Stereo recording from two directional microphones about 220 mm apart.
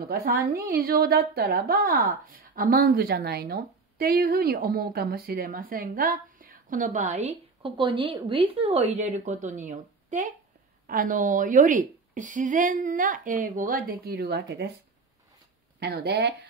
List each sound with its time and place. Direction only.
0.0 s a woman's voice: 45° right (ahead or behind)
15.8 s speech: 45° right (ahead or behind)